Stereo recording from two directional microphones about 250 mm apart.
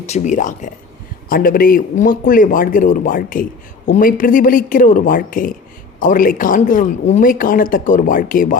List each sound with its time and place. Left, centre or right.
0.0 s speech: left